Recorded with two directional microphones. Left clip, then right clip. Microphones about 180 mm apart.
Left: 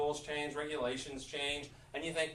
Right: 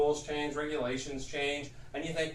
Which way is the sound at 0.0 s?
20° left (ahead or behind).